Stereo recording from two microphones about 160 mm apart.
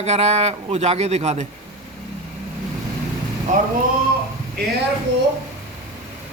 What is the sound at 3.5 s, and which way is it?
Speech, 55° right (ahead or behind).